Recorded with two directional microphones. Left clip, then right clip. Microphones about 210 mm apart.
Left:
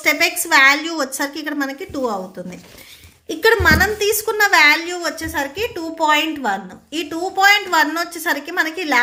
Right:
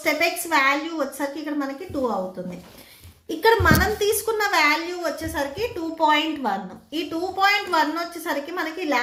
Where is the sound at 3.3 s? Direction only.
20° left (ahead or behind).